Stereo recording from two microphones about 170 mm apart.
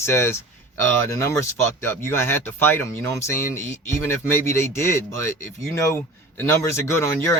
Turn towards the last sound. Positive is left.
turn(degrees=15)  # may be behind; listen again after turning